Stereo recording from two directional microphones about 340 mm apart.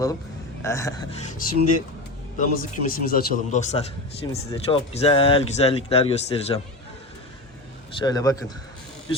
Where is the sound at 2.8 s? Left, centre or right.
Left.